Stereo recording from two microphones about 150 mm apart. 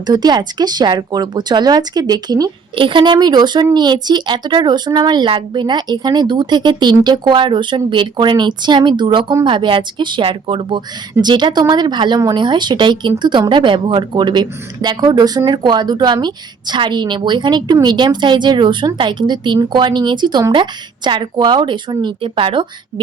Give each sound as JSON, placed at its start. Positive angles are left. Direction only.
{"t": 0.0, "sound": "speech", "side_deg": -30}